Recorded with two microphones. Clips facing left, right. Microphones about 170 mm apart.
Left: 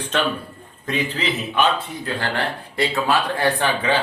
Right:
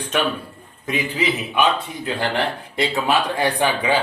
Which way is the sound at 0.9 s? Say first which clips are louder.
Right 1 dB; 10° right (ahead or behind).